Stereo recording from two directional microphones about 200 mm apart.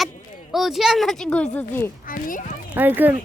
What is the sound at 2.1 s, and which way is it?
Speech, 45° left (ahead or behind).